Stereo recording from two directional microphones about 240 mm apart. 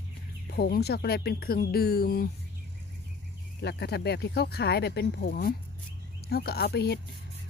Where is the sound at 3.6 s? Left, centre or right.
Left.